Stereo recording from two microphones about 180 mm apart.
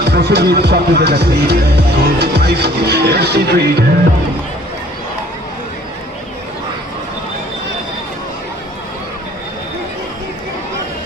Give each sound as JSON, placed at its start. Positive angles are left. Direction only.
{"t": 0.1, "sound": "speech", "side_deg": -65}